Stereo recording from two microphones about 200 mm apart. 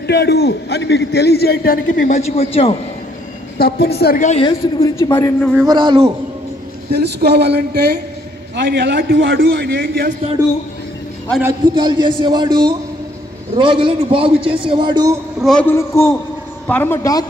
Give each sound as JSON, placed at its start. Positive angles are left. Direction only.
{"t": 0.0, "sound": "a man's voice", "side_deg": 55}
{"t": 3.5, "sound": "a woman's voice", "side_deg": 50}
{"t": 4.4, "sound": "a man's voice", "side_deg": 25}
{"t": 5.7, "sound": "a man's voice", "side_deg": -20}
{"t": 6.9, "sound": "a man's voice", "side_deg": -55}
{"t": 9.8, "sound": "a man's voice", "side_deg": -50}
{"t": 11.7, "sound": "a man's voice", "side_deg": -25}
{"t": 15.4, "sound": "a man's voice", "side_deg": 5}